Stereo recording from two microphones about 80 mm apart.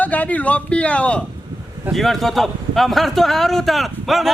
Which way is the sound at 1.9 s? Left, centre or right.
Centre.